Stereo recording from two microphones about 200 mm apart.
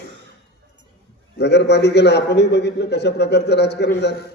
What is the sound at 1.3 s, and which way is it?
A man's voice, 55° left (ahead or behind).